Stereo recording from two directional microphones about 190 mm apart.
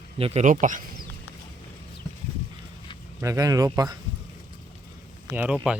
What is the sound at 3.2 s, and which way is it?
Speech, 15° right (ahead or behind).